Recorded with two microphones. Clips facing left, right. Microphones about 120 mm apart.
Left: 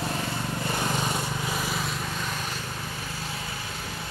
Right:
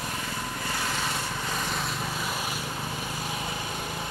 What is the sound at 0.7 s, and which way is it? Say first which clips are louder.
Vehicle: left 4 dB; 20° left (ahead or behind).